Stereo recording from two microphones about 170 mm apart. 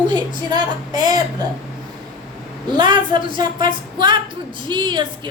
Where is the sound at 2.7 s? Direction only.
25° right (ahead or behind).